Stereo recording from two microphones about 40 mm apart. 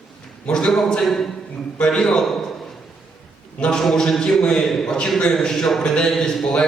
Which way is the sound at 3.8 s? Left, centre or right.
Centre.